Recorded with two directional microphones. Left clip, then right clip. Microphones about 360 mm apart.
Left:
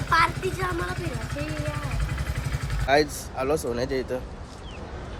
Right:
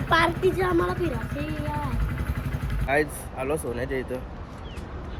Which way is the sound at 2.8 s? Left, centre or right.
Centre.